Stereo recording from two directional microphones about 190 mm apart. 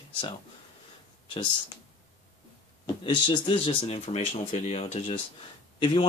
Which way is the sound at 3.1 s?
25° left (ahead or behind).